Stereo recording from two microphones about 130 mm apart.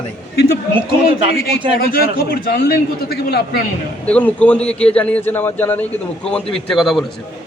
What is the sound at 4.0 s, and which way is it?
A man's voice, 10° left (ahead or behind).